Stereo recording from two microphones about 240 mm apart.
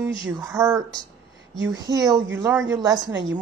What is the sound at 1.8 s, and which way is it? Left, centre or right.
A woman's voice, centre.